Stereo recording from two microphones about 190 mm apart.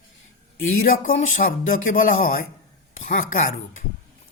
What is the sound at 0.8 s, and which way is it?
A woman's voice, 45° left (ahead or behind).